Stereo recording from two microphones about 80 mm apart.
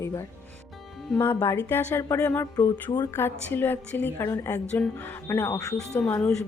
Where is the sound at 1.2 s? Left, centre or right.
Left.